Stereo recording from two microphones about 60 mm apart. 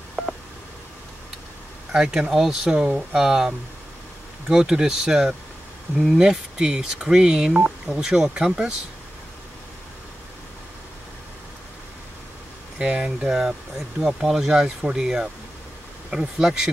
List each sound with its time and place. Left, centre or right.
0.2 s a sound: centre
1.9 s speech: centre
12.7 s speech: centre